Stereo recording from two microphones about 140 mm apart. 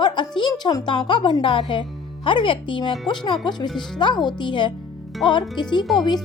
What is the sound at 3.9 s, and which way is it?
Speech, 30° left (ahead or behind).